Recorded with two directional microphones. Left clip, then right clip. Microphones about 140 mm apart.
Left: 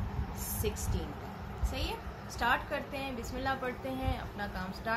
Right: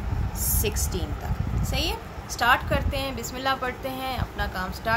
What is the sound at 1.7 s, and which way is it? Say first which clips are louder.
A woman's voice: right 10 dB; 50° right (ahead or behind).